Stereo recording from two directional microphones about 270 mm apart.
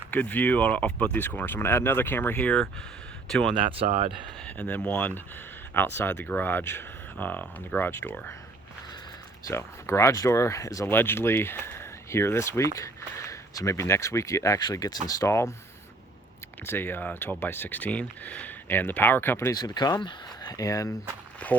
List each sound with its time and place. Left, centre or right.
0.1 s speech: centre
3.5 s speech: centre
4.4 s speech: centre
9.5 s speech: centre
16.6 s speech: centre